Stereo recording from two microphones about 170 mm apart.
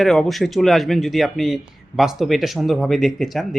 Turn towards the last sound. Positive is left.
turn(degrees=0)  # may be behind; listen again after turning